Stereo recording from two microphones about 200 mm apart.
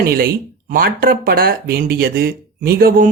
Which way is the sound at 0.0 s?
50° right (ahead or behind).